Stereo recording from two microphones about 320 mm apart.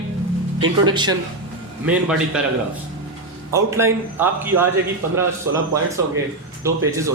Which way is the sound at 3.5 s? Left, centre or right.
Centre.